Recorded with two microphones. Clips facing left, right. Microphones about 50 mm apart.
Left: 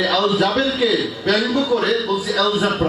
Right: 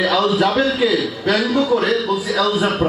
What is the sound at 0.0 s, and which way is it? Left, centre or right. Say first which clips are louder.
A man's voice: right 1 dB; centre.